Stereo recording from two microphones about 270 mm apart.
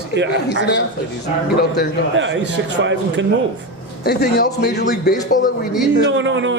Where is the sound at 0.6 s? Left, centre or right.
Left.